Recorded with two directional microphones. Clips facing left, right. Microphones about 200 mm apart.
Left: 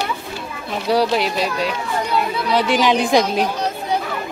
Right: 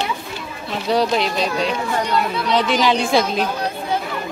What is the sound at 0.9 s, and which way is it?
A woman's voice, 10° left (ahead or behind).